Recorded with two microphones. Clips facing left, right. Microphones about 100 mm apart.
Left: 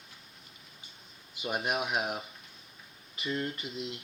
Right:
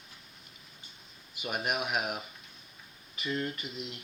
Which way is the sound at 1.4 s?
25° left (ahead or behind).